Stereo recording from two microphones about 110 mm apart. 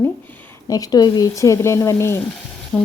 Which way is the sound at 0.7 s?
35° left (ahead or behind).